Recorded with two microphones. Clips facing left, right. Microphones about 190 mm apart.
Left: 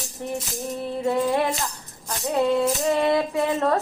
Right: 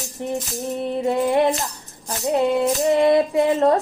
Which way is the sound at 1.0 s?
20° right (ahead or behind).